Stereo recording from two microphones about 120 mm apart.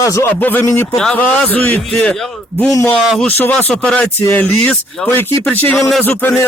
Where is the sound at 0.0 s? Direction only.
25° left (ahead or behind).